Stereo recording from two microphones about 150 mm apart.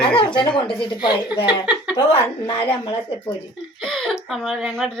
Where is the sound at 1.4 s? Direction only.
5° right (ahead or behind).